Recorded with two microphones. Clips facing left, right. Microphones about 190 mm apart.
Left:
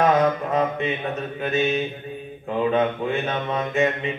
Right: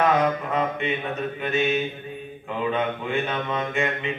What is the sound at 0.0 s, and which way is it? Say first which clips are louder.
Mantra: left 2 dB; 35° left (ahead or behind).